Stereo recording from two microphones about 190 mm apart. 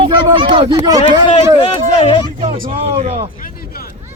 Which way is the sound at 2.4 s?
30° right (ahead or behind).